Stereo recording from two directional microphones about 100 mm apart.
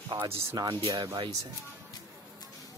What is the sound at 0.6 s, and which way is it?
Speech, 45° right (ahead or behind).